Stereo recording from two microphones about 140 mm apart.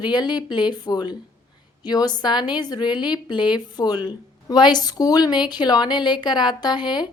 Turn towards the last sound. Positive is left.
turn(degrees=30)  # may be behind; listen again after turning